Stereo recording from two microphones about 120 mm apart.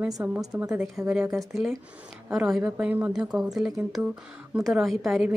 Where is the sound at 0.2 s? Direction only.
15° right (ahead or behind).